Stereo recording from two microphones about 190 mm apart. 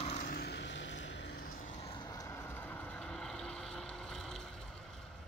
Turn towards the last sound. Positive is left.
turn(degrees=0)  # may be behind; listen again after turning